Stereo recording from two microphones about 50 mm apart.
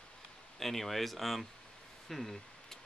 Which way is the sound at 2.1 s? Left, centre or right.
Centre.